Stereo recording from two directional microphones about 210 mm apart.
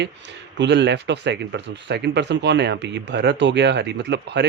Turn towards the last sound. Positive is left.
turn(degrees=-55)  # may be behind; listen again after turning